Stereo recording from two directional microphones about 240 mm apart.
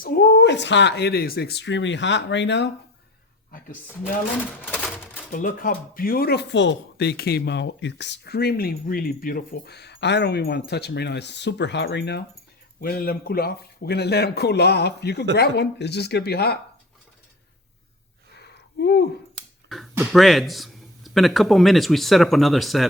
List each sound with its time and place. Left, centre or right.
0.0 s speech: left
4.0 s speech: centre
5.3 s speech: left
18.4 s a sound: left
19.6 s a sound: centre
19.9 s speech: centre